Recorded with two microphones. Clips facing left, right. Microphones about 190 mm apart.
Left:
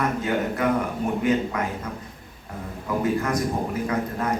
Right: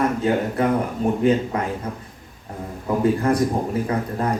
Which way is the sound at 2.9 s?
30° right (ahead or behind).